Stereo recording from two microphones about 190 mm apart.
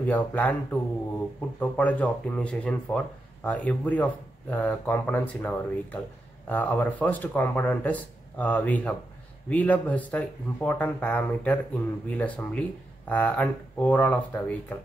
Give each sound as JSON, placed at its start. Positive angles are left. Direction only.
{"t": 0.0, "sound": "speech", "side_deg": 10}